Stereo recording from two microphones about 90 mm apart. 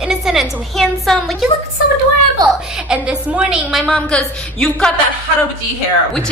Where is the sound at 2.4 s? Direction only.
50° right (ahead or behind).